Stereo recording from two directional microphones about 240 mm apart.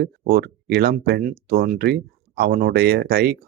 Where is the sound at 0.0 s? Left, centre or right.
Right.